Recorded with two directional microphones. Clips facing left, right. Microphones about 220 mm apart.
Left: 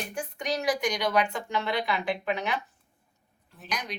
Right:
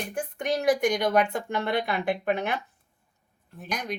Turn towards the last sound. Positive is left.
turn(degrees=-50)  # may be behind; listen again after turning